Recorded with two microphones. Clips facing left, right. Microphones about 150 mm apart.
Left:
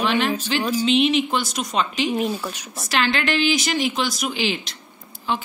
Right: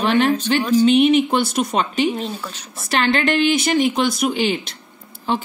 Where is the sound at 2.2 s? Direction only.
10° left (ahead or behind).